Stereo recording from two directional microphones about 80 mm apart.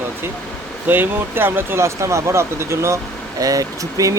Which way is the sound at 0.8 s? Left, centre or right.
Right.